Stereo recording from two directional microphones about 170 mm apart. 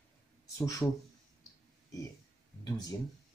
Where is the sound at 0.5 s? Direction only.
20° left (ahead or behind).